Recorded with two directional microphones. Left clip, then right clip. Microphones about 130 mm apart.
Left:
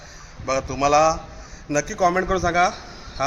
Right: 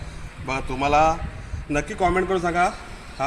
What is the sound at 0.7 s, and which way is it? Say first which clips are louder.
Speech: left 1 dB; 60° left (ahead or behind).